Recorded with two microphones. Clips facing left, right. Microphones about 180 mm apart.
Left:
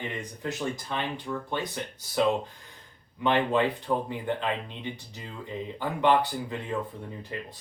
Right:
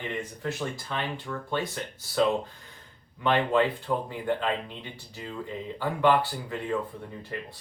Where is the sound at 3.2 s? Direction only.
20° left (ahead or behind).